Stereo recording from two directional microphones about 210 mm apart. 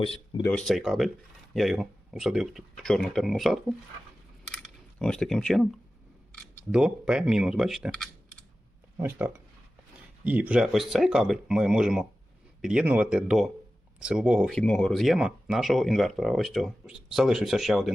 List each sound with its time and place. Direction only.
0.0 s speech: 25° left (ahead or behind)
0.4 s speech: 5° left (ahead or behind)
4.5 s a sound: 5° left (ahead or behind)
6.3 s speech: 5° right (ahead or behind)
9.0 s speech: 10° right (ahead or behind)